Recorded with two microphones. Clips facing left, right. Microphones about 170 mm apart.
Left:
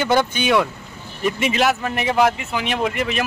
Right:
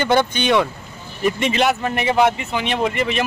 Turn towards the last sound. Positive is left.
turn(degrees=0)  # may be behind; listen again after turning